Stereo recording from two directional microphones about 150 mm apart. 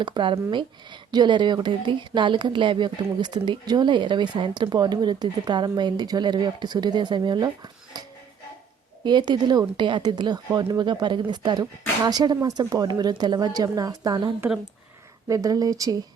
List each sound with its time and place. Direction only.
0.0 s speech: 30° right (ahead or behind)
9.0 s speech: 30° right (ahead or behind)